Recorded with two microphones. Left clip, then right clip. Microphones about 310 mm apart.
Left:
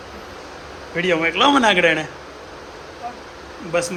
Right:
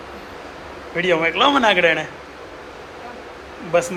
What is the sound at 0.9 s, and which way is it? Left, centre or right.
A man's voice, centre.